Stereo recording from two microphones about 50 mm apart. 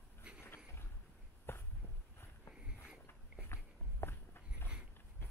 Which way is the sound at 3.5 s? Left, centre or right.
Left.